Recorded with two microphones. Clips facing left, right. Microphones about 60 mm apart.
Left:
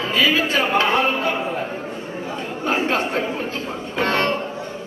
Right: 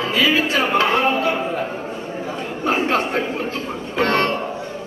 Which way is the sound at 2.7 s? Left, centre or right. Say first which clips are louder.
Right 2 dB; right.